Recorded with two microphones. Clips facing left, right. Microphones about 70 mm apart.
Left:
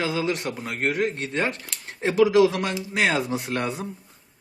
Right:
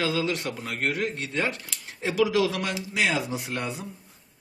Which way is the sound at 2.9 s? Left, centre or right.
Left.